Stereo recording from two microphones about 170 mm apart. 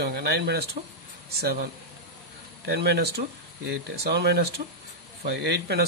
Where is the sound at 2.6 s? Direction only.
80° right.